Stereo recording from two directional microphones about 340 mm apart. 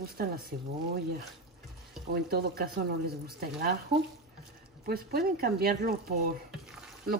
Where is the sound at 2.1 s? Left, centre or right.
Right.